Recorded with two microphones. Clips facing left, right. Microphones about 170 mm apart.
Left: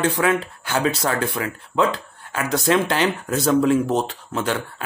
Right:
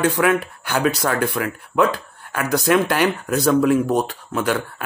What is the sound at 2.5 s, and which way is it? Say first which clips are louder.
Speech: right 2 dB; 25° left (ahead or behind).